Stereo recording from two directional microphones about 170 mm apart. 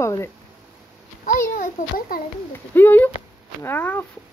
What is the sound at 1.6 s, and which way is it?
Speech, 55° left (ahead or behind).